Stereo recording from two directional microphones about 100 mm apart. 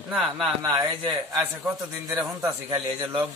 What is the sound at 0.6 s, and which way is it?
Speech, 40° right (ahead or behind).